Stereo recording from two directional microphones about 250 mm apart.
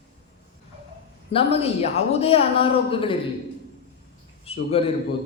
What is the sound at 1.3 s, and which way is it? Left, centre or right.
A man's voice, left.